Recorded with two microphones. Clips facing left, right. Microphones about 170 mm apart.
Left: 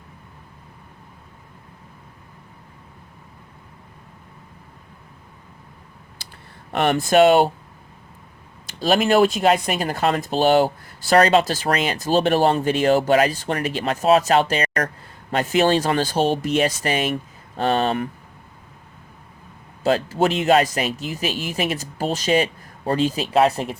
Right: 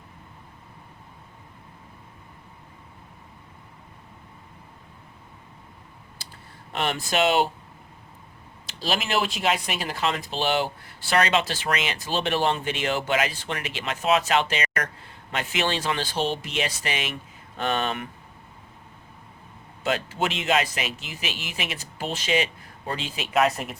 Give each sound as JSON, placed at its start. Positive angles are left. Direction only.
{"t": 6.7, "sound": "speech", "side_deg": 55}
{"t": 8.6, "sound": "speech", "side_deg": 50}
{"t": 19.8, "sound": "speech", "side_deg": 35}